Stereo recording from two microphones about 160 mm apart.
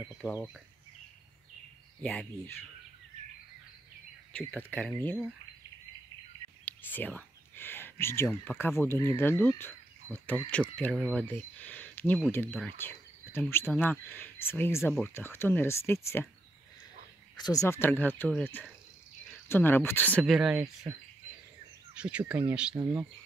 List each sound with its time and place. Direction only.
2.0 s speech: 5° left (ahead or behind)
4.3 s speech: 5° left (ahead or behind)
6.6 s speech: 10° left (ahead or behind)
11.1 s a sound: 10° left (ahead or behind)
12.3 s speech: 15° left (ahead or behind)
17.4 s speech: 20° left (ahead or behind); by 20.7 s 5° right (ahead or behind)
22.0 s speech: 5° right (ahead or behind)